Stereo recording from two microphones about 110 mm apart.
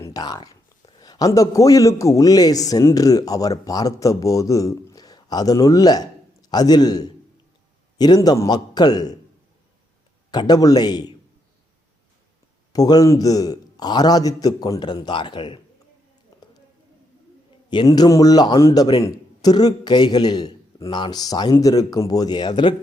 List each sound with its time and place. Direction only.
0.0 s a man's voice: 35° left (ahead or behind)
10.3 s a man's voice: 40° left (ahead or behind)
12.7 s a man's voice: 35° left (ahead or behind)
16.3 s a sound: 35° left (ahead or behind)
17.8 s a man's voice: 35° left (ahead or behind)